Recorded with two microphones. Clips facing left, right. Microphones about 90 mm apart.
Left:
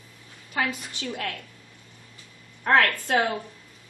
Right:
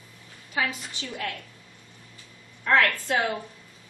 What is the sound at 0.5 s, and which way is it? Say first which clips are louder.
Speech: left 1 dB; 50° left (ahead or behind).